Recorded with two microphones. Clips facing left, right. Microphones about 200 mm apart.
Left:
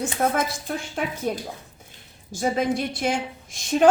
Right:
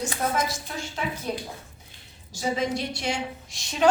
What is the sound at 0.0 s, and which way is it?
A woman's voice, 55° left (ahead or behind).